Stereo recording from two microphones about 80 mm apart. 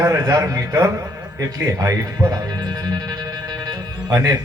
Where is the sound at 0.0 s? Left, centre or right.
Right.